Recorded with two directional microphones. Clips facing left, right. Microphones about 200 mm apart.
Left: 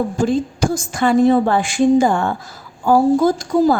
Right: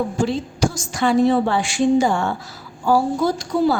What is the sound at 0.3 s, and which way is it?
A woman's voice, 50° left (ahead or behind).